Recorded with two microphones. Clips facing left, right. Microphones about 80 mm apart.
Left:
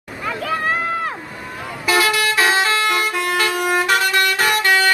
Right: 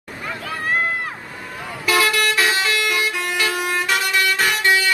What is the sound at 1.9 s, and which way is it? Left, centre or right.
Vehicle, left.